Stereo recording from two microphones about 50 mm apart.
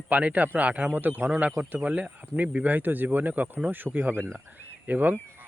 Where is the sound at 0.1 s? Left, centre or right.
Right.